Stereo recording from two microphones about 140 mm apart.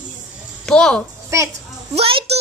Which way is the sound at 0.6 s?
5° left (ahead or behind).